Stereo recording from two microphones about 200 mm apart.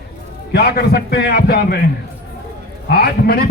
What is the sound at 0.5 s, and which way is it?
A man's voice, 50° left (ahead or behind).